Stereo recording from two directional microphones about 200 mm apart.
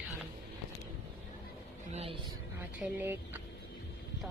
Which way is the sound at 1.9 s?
30° right (ahead or behind).